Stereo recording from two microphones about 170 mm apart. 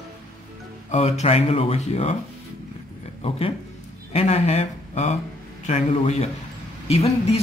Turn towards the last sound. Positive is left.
turn(degrees=35)  # may be behind; listen again after turning